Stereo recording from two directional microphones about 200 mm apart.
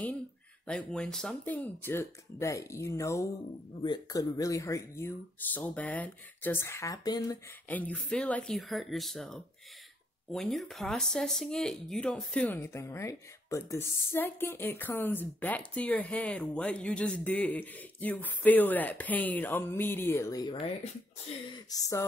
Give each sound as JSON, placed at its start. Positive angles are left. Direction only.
{"t": 0.7, "sound": "speech", "side_deg": 5}
{"t": 20.5, "sound": "speech", "side_deg": 30}
{"t": 21.6, "sound": "speech", "side_deg": 15}